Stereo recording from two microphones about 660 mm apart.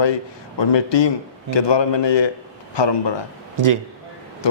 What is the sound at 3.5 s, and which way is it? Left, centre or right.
Speech, right.